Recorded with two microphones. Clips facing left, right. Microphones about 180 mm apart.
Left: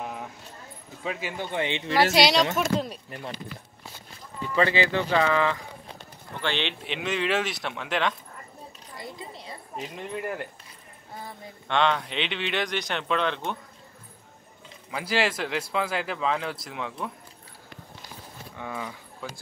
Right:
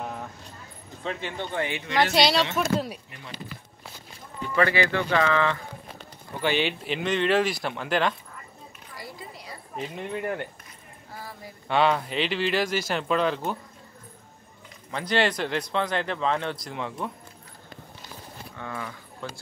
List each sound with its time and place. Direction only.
0.0 s clip-clop: 5° left (ahead or behind)
1.0 s speech: 5° left (ahead or behind)
1.5 s speech: 20° left (ahead or behind)
2.1 s speech: centre (ahead or behind)
4.6 s speech: 20° left (ahead or behind)
6.4 s speech: 10° right (ahead or behind)
8.9 s a sound: 25° left (ahead or behind)
9.9 s speech: centre (ahead or behind)
11.6 s speech: 5° right (ahead or behind)
14.9 s speech: 5° left (ahead or behind)
18.6 s speech: 10° left (ahead or behind)